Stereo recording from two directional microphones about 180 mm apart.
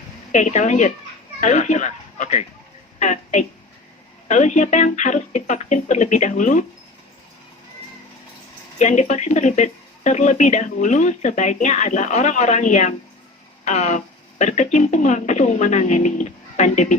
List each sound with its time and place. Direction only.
0.3 s a woman's voice: 40° left (ahead or behind)
8.8 s speech: 40° left (ahead or behind)